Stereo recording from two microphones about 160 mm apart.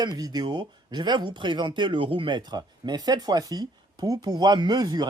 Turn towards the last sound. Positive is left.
turn(degrees=-25)  # may be behind; listen again after turning